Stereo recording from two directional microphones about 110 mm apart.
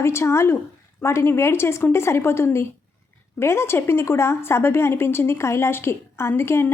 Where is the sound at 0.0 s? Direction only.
25° left (ahead or behind).